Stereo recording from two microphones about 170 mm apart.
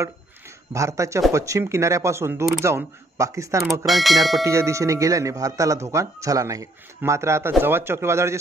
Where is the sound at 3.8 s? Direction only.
Centre (ahead or behind).